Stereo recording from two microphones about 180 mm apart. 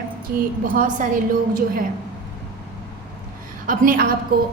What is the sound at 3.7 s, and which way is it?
Speech, 50° right (ahead or behind).